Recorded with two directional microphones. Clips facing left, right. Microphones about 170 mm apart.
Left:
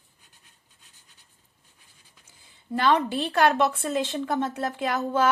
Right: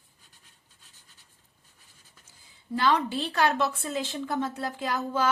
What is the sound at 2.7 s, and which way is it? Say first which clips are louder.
Speech: left 3 dB; 55° left (ahead or behind).